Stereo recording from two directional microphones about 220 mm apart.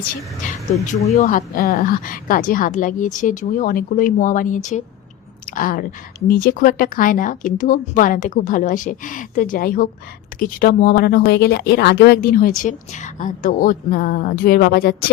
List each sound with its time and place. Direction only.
1.1 s speech: 35° left (ahead or behind)